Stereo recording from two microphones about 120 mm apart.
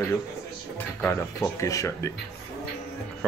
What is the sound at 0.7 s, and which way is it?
Speech, 20° left (ahead or behind).